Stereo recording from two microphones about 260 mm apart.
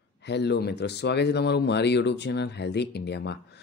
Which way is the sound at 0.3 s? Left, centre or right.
Left.